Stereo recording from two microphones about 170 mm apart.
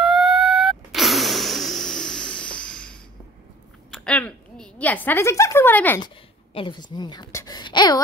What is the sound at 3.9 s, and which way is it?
A woman's voice, 5° left (ahead or behind).